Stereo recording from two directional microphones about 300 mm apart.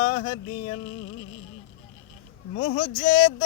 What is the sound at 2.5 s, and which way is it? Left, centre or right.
Speech, left.